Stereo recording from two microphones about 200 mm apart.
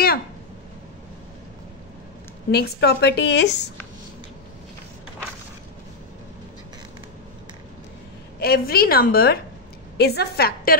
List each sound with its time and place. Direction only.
2.5 s a woman's voice: 55° left (ahead or behind)
8.4 s a woman's voice: 50° left (ahead or behind)